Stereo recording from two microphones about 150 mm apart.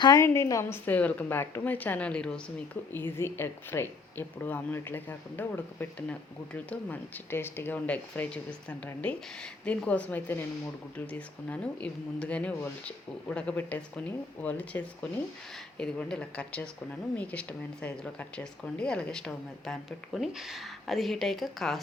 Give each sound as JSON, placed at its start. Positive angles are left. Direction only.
{"t": 0.0, "sound": "a woman's voice", "side_deg": 25}